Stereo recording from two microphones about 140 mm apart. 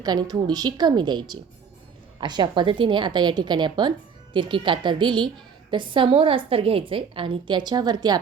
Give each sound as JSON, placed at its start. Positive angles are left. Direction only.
{"t": 0.0, "sound": "a woman's voice", "side_deg": -30}